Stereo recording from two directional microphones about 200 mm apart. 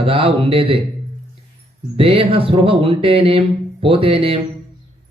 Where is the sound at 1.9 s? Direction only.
30° right (ahead or behind).